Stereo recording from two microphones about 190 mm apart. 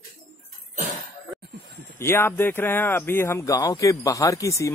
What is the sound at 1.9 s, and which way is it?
Speech, 10° left (ahead or behind).